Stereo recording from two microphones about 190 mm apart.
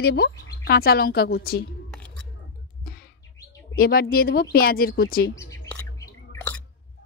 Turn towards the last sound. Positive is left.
turn(degrees=10)  # may be behind; listen again after turning